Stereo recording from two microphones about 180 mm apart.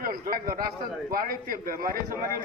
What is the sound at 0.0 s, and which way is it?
A man's voice, 50° right (ahead or behind).